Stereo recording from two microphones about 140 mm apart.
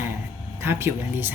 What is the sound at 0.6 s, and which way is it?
Speech, 15° right (ahead or behind).